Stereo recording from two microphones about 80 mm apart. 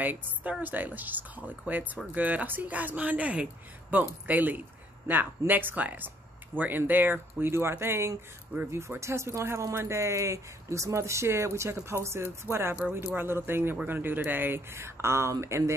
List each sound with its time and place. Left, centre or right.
0.0 s speech: right